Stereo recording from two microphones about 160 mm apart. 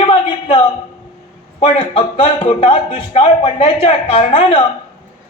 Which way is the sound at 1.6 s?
35° left (ahead or behind).